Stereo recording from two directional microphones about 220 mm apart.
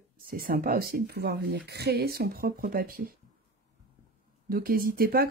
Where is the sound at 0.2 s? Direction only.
40° right (ahead or behind).